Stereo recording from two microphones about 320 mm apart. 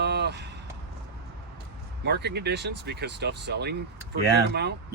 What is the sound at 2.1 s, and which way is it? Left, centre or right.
Speech, right.